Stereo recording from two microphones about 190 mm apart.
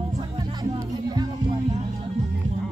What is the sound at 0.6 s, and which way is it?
Music, 20° right (ahead or behind).